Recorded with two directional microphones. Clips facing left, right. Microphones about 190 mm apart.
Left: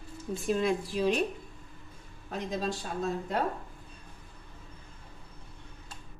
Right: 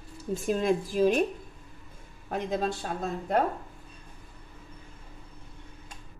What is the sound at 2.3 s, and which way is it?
A woman's voice, 55° right (ahead or behind).